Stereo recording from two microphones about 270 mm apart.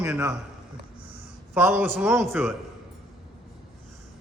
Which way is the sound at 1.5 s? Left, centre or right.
Centre.